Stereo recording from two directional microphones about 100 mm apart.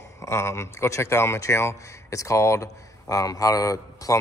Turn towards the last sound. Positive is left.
turn(degrees=35)  # may be behind; listen again after turning